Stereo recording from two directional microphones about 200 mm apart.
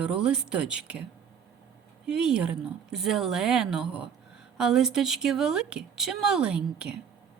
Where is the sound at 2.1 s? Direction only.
5° right (ahead or behind).